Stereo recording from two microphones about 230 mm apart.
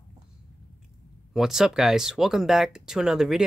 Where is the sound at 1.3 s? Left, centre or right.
Centre.